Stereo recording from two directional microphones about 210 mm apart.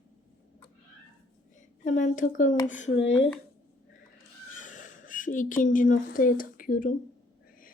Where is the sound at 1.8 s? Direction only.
35° left (ahead or behind).